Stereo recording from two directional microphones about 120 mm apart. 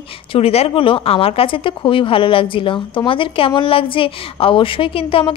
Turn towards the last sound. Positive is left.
turn(degrees=50)  # may be behind; listen again after turning